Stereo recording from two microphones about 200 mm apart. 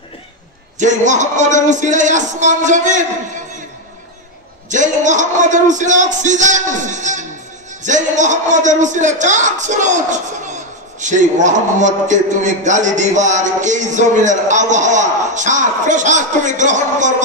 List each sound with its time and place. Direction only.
0.7 s a man's voice: 40° right (ahead or behind)
4.6 s a man's voice: 40° right (ahead or behind)